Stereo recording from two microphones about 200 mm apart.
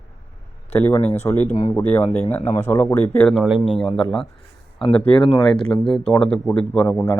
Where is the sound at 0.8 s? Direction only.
10° left (ahead or behind).